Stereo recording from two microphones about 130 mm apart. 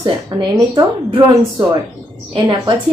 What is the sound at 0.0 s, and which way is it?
A woman's voice, 35° right (ahead or behind).